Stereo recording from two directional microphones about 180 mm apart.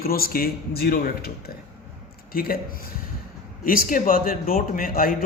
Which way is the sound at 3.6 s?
50° left (ahead or behind).